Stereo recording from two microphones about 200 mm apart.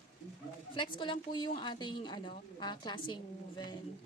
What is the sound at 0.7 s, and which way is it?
A woman's voice, 25° left (ahead or behind).